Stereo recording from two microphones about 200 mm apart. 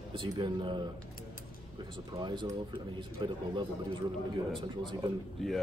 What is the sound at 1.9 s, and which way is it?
A man's voice, 25° right (ahead or behind).